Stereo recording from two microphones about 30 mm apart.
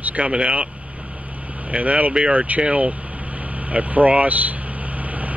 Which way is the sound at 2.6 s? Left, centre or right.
Right.